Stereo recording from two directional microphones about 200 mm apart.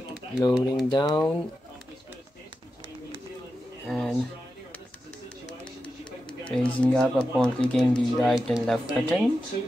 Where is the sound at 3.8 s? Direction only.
Centre (ahead or behind).